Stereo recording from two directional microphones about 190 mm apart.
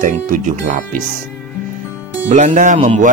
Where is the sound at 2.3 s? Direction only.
40° right (ahead or behind).